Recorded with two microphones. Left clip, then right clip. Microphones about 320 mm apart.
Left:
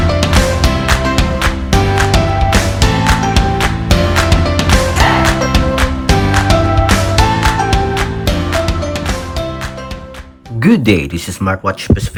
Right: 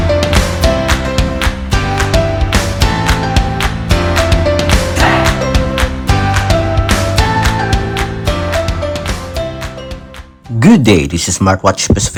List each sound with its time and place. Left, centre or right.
0.2 s music: centre
10.6 s speech: centre